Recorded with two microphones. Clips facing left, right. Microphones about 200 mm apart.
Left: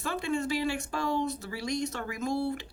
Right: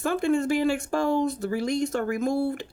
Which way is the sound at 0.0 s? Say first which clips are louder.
Right 7 dB; 50° right (ahead or behind).